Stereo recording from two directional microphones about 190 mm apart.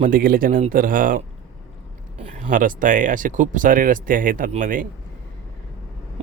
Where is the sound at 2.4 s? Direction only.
45° right (ahead or behind).